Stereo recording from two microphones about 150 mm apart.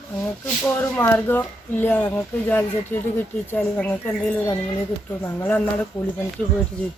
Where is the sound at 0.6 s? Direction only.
15° left (ahead or behind).